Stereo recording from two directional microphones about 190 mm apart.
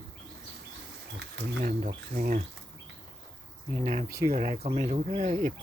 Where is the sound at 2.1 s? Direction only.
45° right (ahead or behind).